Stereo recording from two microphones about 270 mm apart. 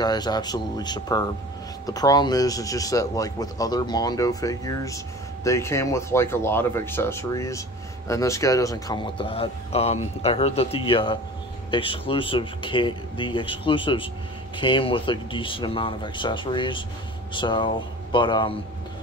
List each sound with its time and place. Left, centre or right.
0.0 s a man's voice: centre